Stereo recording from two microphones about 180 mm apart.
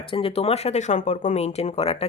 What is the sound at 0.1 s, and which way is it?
Speech, 30° left (ahead or behind).